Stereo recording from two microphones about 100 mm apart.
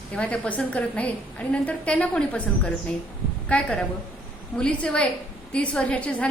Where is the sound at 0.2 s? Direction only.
15° left (ahead or behind).